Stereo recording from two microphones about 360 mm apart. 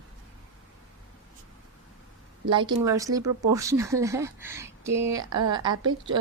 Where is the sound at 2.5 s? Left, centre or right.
Centre.